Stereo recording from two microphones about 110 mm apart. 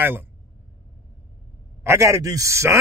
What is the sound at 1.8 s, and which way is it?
A man's voice, 25° right (ahead or behind).